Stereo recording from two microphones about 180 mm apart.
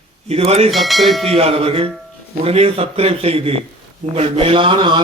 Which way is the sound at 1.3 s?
30° right (ahead or behind).